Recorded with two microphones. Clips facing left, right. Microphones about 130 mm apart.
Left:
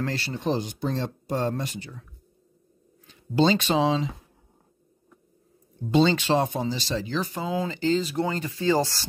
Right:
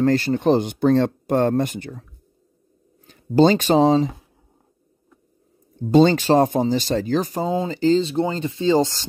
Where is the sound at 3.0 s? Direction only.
50° right (ahead or behind).